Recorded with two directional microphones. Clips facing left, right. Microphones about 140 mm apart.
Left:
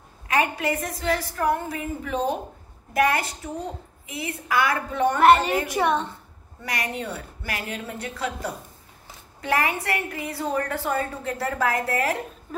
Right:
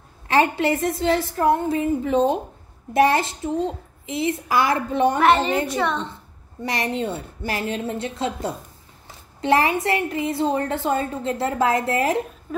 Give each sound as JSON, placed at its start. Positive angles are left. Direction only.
{"t": 0.3, "sound": "a woman's voice", "side_deg": -30}
{"t": 5.2, "sound": "a child's voice", "side_deg": 0}
{"t": 5.7, "sound": "a child's voice", "side_deg": 15}
{"t": 6.6, "sound": "a woman's voice", "side_deg": -25}